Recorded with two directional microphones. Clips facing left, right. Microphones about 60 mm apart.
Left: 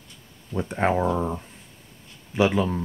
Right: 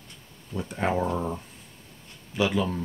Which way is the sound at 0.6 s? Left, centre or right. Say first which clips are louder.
Left 4 dB; left.